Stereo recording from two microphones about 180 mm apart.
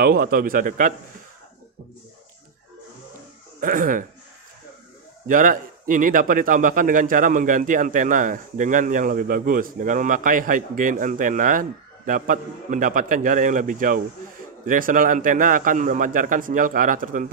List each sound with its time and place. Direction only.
0.0 s speech: 55° right (ahead or behind)
3.6 s speech: 50° right (ahead or behind)
5.2 s speech: 50° right (ahead or behind)